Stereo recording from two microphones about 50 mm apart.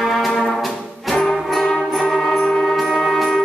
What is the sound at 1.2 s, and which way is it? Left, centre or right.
Music, centre.